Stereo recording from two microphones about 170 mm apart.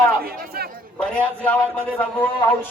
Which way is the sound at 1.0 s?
10° left (ahead or behind).